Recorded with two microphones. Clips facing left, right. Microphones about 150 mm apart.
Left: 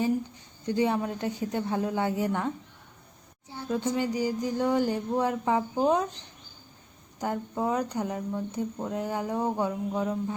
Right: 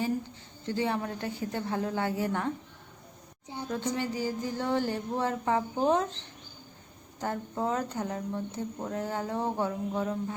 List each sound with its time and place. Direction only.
0.6 s speech: 15° left (ahead or behind)
3.5 s a sound: 20° right (ahead or behind)
3.9 s speech: 15° left (ahead or behind)